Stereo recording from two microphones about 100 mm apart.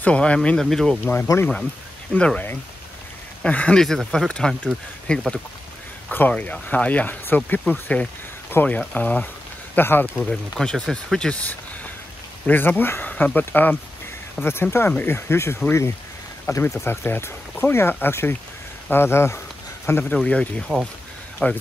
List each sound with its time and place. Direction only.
0.0 s speech: 10° left (ahead or behind)
1.1 s speech: 25° left (ahead or behind)
2.1 s speech: 10° left (ahead or behind)
3.4 s speech: 10° left (ahead or behind)
10.3 s speech: 5° left (ahead or behind)